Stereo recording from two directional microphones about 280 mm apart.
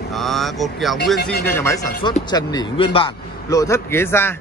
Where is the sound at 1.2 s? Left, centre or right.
Left.